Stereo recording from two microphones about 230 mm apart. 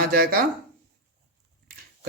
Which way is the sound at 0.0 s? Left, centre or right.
Right.